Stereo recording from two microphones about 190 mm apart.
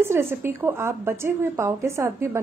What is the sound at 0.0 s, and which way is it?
Speech, 15° right (ahead or behind).